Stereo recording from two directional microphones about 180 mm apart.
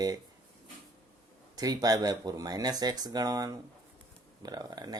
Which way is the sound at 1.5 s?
20° right (ahead or behind).